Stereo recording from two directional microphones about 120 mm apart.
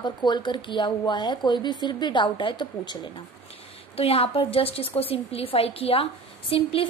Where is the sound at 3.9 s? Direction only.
55° left (ahead or behind).